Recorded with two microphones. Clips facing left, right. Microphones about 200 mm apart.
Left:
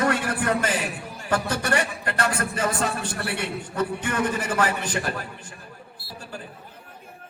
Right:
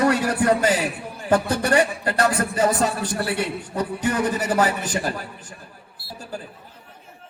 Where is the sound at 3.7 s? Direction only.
35° right (ahead or behind).